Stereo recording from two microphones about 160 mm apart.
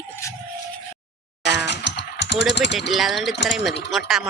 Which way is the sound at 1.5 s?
90° left.